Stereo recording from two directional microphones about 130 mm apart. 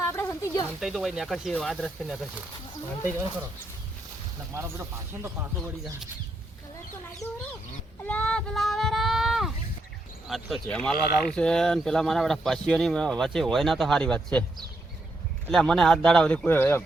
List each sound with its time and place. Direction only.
0.1 s a sound: 20° left (ahead or behind)
0.8 s speech: centre (ahead or behind)
4.5 s speech: 25° right (ahead or behind)
7.2 s speech: 25° left (ahead or behind)
8.0 s a sound: 10° left (ahead or behind)
10.2 s speech: centre (ahead or behind)
15.4 s speech: 5° left (ahead or behind)